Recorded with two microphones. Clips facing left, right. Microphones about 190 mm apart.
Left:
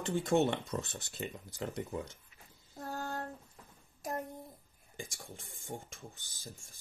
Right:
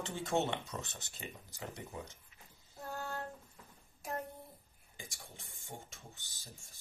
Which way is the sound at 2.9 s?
40° left (ahead or behind).